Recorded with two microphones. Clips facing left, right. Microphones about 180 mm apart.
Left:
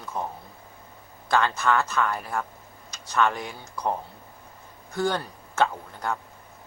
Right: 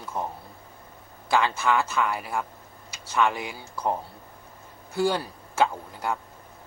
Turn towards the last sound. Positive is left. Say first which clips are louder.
# right 1 dB
turn(degrees=-10)  # may be behind; listen again after turning